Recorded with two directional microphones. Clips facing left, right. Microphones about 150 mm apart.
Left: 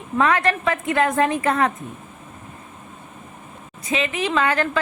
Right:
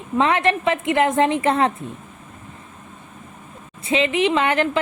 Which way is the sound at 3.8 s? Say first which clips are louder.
Right 5 dB; 25° right (ahead or behind).